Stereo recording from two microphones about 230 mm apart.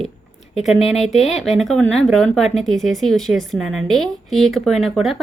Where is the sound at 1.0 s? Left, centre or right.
Centre.